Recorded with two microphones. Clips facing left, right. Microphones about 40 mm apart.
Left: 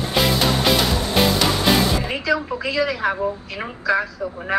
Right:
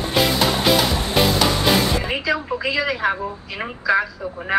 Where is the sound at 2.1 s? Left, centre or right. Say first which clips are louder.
Even; right.